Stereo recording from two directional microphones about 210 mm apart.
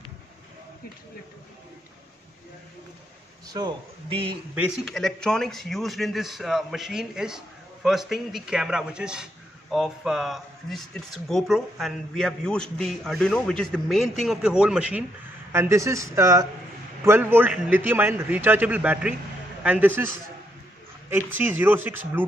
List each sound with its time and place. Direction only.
3.4 s a man's voice: 20° right (ahead or behind)
4.6 s a man's voice: centre (ahead or behind)
21.3 s a man's voice: 10° right (ahead or behind)